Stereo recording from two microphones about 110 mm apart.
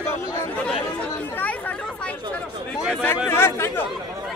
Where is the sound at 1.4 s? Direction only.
15° left (ahead or behind).